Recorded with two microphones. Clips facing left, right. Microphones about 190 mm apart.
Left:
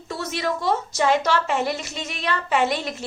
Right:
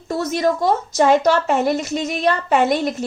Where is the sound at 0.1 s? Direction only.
45° right (ahead or behind).